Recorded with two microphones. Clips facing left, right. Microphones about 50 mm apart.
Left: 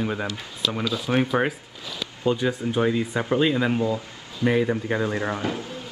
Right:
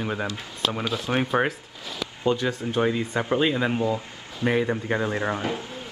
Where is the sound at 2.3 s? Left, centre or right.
Centre.